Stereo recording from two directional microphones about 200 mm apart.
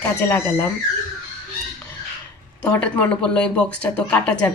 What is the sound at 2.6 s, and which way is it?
Speech, 10° left (ahead or behind).